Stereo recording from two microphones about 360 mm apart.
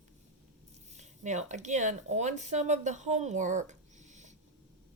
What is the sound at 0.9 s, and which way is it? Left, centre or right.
Speech, centre.